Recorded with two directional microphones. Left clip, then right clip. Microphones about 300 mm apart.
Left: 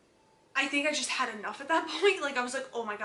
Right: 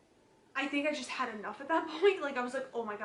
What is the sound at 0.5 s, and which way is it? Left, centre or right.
A woman's voice, centre.